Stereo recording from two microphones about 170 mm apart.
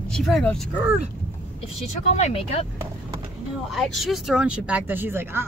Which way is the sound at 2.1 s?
35° left (ahead or behind).